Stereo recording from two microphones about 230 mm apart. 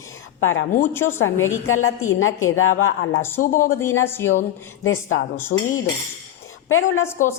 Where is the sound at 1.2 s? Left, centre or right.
Left.